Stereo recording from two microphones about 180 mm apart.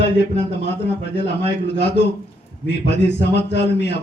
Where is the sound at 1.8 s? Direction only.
70° left (ahead or behind).